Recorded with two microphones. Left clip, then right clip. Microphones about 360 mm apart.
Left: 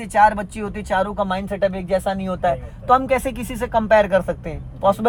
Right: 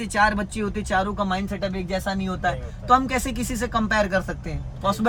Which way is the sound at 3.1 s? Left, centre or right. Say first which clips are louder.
Left 4 dB; left.